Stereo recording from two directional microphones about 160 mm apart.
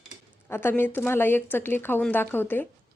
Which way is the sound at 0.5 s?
15° left (ahead or behind).